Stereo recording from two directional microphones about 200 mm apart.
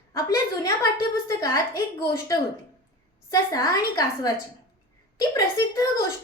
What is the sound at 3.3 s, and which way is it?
A woman's voice, 20° left (ahead or behind).